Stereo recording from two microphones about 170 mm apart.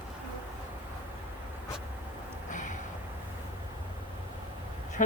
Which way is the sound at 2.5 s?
50° left (ahead or behind).